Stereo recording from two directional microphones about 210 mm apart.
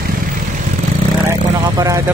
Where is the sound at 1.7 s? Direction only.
15° right (ahead or behind).